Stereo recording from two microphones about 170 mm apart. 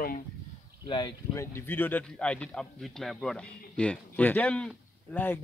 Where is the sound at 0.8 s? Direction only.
25° left (ahead or behind).